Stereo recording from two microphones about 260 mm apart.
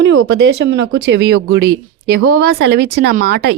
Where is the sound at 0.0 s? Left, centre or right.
Right.